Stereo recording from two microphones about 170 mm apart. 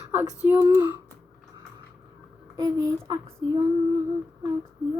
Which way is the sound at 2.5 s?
20° right (ahead or behind).